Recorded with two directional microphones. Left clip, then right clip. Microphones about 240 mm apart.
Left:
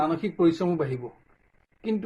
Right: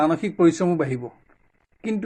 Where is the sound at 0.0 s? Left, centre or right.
Right.